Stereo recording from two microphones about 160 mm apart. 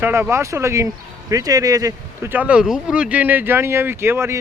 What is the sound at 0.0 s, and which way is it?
A man's voice, 15° right (ahead or behind).